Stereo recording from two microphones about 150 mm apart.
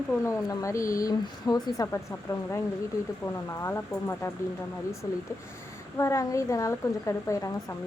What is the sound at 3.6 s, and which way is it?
Speech, 15° left (ahead or behind).